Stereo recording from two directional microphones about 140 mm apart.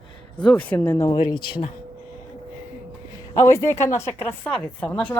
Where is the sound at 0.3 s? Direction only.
10° left (ahead or behind).